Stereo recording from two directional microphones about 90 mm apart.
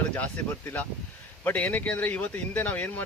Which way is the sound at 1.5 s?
15° left (ahead or behind).